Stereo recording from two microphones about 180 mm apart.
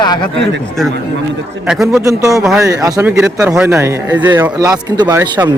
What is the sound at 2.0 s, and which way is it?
Speech, 20° right (ahead or behind).